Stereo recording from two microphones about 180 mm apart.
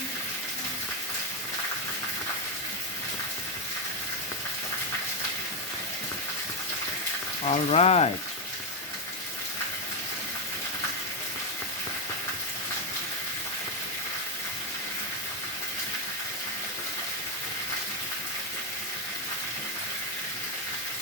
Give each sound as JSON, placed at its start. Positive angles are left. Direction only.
{"t": 7.4, "sound": "speech", "side_deg": 35}